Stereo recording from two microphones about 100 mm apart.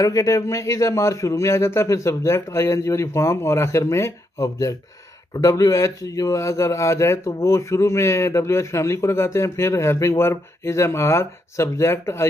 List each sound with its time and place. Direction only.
0.0 s a man's voice: 35° left (ahead or behind)